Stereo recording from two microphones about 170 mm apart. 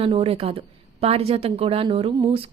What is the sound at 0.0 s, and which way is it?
A woman's voice, 35° right (ahead or behind).